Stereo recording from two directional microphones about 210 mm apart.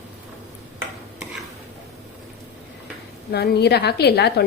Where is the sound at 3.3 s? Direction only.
50° left (ahead or behind).